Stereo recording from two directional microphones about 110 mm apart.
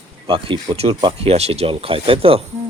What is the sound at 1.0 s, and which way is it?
Speech, 60° right (ahead or behind).